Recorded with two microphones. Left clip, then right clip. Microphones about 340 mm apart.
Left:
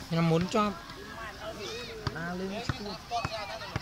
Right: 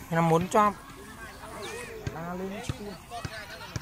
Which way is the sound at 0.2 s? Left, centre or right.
Right.